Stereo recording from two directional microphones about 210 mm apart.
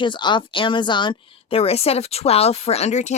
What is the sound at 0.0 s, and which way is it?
Speech, 20° left (ahead or behind).